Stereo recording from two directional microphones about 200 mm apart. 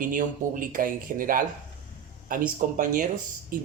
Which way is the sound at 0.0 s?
45° right (ahead or behind).